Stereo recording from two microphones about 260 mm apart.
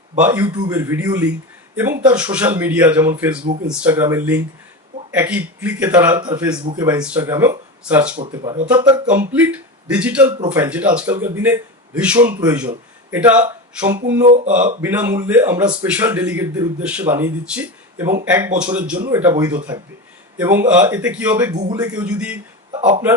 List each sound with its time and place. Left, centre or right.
0.2 s a man's voice: centre
8.3 s a man's voice: centre
14.2 s speech: right
14.8 s a man's voice: centre
22.7 s speech: right